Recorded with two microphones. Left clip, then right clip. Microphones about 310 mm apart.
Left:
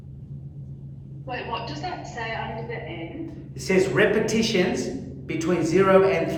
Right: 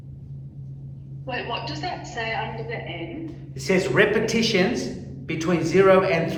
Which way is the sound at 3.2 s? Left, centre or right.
Right.